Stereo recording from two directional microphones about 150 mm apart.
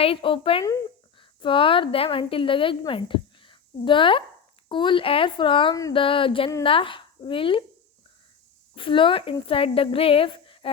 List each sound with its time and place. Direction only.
0.0 s a woman's voice: 35° left (ahead or behind)
8.7 s a woman's voice: 35° left (ahead or behind)